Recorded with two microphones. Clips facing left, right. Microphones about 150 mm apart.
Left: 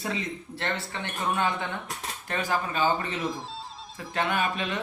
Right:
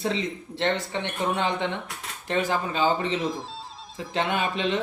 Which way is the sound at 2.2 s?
20° right (ahead or behind).